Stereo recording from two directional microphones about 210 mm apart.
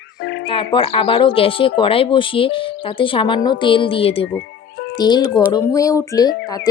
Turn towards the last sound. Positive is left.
turn(degrees=15)  # may be behind; listen again after turning